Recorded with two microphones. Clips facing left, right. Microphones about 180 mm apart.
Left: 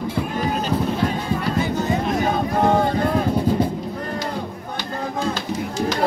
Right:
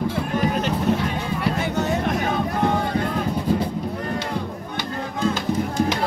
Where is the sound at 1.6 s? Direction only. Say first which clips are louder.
Left 1 dB; 70° right (ahead or behind).